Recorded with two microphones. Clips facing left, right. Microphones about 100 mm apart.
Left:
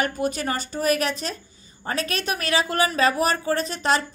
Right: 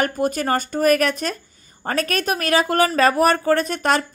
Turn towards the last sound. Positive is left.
turn(degrees=-55)  # may be behind; listen again after turning